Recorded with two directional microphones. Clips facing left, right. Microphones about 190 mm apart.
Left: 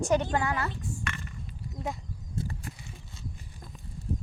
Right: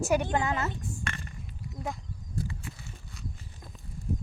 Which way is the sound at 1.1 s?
35° right (ahead or behind).